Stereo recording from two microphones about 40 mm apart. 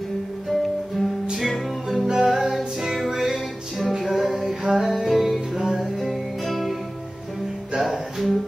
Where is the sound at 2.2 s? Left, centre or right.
Centre.